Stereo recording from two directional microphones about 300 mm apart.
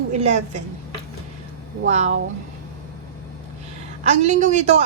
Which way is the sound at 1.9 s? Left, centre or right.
Right.